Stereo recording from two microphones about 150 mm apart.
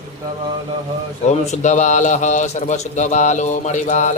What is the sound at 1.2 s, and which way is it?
A man's voice, 50° left (ahead or behind).